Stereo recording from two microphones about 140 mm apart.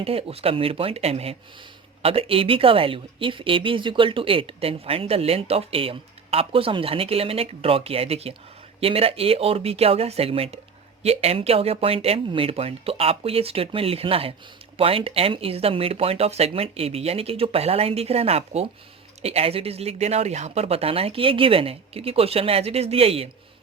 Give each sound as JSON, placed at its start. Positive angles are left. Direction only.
{"t": 0.0, "sound": "speech", "side_deg": -45}